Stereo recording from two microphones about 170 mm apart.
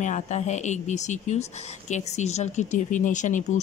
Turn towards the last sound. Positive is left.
turn(degrees=45)  # may be behind; listen again after turning